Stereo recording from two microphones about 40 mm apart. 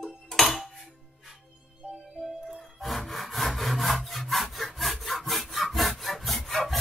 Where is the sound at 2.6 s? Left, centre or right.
Centre.